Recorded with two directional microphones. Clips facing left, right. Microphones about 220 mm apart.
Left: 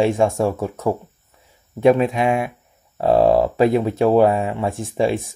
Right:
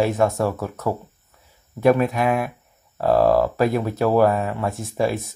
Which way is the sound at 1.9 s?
25° left (ahead or behind).